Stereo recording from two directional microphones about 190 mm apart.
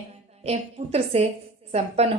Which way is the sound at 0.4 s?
35° right (ahead or behind).